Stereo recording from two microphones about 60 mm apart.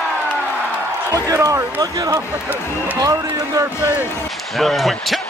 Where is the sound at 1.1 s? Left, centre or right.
Right.